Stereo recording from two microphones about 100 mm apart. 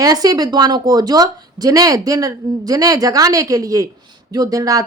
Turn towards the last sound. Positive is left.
turn(degrees=-35)  # may be behind; listen again after turning